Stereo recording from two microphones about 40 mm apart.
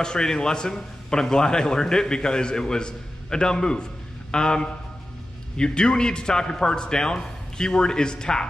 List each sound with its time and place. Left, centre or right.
0.0 s a man's voice: centre